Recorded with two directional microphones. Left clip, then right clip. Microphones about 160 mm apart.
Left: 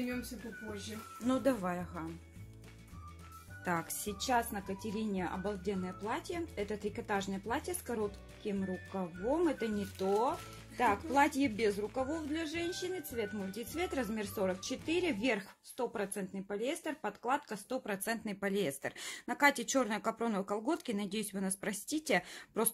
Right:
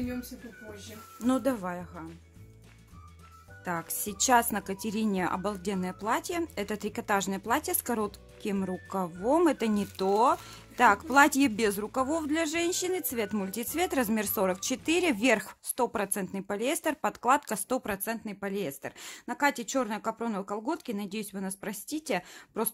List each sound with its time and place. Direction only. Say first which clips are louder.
1.2 s a woman's voice: right 4 dB; 25° right (ahead or behind); by 2.0 s 10° right (ahead or behind)
4.3 s speech: right 9 dB; 40° right (ahead or behind)
17.8 s a woman's voice: right 4 dB; 20° right (ahead or behind)